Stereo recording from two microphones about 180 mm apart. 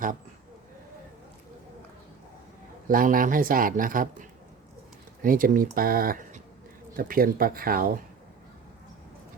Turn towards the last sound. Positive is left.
turn(degrees=-55)  # may be behind; listen again after turning